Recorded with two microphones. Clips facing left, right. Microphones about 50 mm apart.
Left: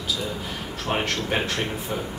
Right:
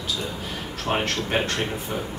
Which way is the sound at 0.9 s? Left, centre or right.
Centre.